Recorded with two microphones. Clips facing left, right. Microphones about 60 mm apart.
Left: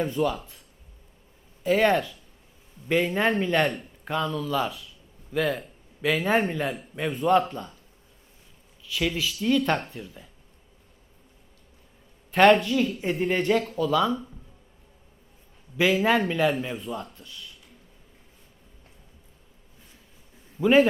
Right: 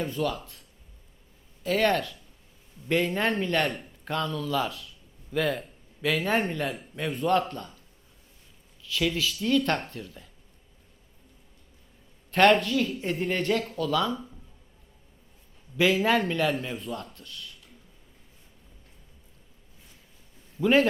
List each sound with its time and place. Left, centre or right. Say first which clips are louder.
0.2 s a man's voice: left 3 dB; centre
1.6 s a man's voice: left 3 dB; centre
2.9 s a man's voice: left 2 dB; centre
8.8 s a man's voice: even; centre
12.3 s a man's voice: left 2 dB; centre
15.8 s a man's voice: left 1 dB; centre
20.6 s a man's voice: left 3 dB; centre